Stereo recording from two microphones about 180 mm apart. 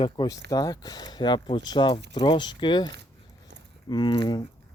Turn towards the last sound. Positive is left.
turn(degrees=25)  # may be behind; listen again after turning